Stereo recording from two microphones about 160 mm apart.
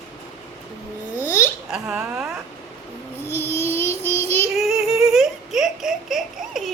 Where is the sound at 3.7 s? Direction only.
15° left (ahead or behind).